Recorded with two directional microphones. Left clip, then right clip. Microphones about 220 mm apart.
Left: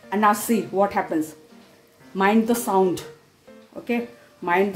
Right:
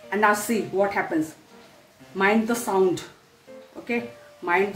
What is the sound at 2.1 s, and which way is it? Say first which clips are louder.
Speech: left 2 dB; 30° left (ahead or behind).